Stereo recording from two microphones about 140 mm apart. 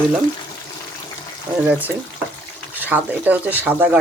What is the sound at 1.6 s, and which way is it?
Speech, 10° right (ahead or behind).